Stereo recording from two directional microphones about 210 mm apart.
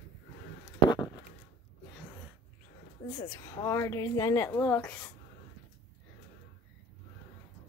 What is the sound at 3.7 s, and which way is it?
Speech, 15° left (ahead or behind).